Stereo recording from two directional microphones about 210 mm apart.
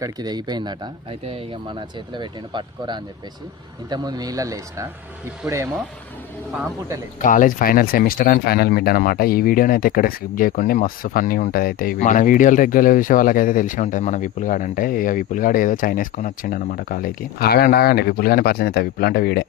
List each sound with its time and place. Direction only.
0.0 s speech: 20° right (ahead or behind)
7.2 s speech: 40° left (ahead or behind)